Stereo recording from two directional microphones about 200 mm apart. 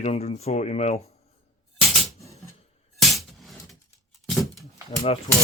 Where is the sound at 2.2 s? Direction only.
15° left (ahead or behind).